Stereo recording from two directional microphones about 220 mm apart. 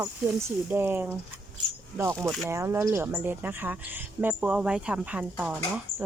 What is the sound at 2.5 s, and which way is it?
Speech, 10° right (ahead or behind).